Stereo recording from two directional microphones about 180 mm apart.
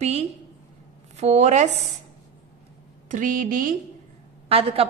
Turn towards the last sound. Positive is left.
turn(degrees=-30)  # may be behind; listen again after turning